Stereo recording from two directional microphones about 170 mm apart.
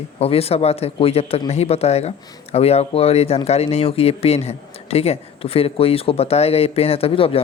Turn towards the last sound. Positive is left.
turn(degrees=35)  # may be behind; listen again after turning